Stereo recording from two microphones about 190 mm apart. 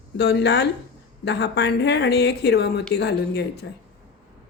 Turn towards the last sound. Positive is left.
turn(degrees=60)  # may be behind; listen again after turning